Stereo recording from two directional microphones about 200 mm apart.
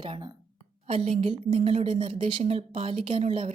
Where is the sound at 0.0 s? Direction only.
25° right (ahead or behind).